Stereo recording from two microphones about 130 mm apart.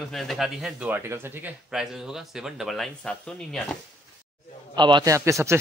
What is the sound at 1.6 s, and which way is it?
Speech, 5° right (ahead or behind).